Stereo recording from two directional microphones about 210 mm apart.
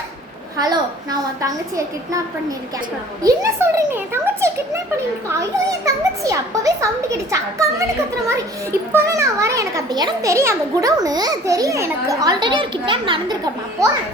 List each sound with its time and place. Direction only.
0.6 s a child's voice: 20° right (ahead or behind)
3.2 s a child's voice: 15° right (ahead or behind)
8.9 s a child's voice: 15° right (ahead or behind)